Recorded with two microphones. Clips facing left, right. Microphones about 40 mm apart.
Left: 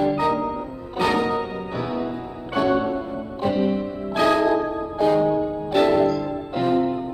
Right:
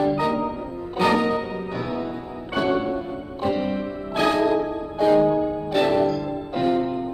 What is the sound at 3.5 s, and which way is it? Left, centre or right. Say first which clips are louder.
Music: left 2 dB; centre.